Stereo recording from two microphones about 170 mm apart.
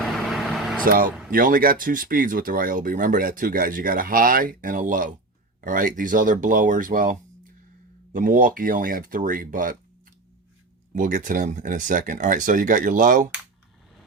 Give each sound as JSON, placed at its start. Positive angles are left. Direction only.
{"t": 0.0, "sound": "vehicle", "side_deg": 0}
{"t": 0.9, "sound": "speech", "side_deg": -55}
{"t": 10.9, "sound": "speech", "side_deg": -50}